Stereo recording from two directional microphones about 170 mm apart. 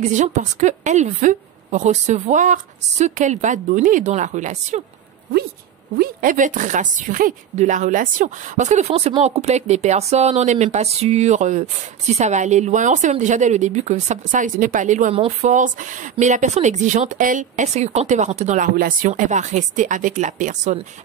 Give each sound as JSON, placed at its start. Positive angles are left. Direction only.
{"t": 0.0, "sound": "speech", "side_deg": -45}
{"t": 5.9, "sound": "speech", "side_deg": -50}
{"t": 18.8, "sound": "speech", "side_deg": -55}